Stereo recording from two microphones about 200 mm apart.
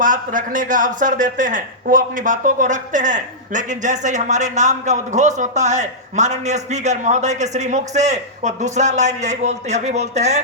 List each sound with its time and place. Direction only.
0.0 s speech: 40° right (ahead or behind)